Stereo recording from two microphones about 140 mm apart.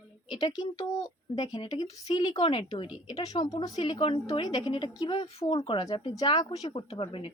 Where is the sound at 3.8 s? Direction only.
40° left (ahead or behind).